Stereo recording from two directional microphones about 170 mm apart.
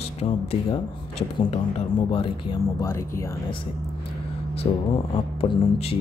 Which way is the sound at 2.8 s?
15° left (ahead or behind).